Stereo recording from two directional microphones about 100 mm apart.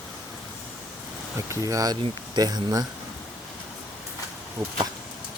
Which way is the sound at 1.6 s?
35° right (ahead or behind).